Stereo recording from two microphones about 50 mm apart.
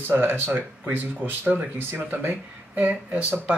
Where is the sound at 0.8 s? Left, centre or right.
Right.